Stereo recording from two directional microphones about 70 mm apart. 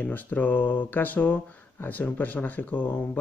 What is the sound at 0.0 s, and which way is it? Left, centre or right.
Speech, left.